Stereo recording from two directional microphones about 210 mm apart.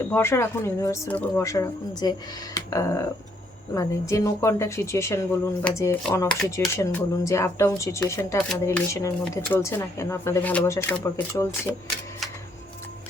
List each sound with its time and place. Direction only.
0.0 s speech: 10° left (ahead or behind)
6.7 s speech: 15° left (ahead or behind)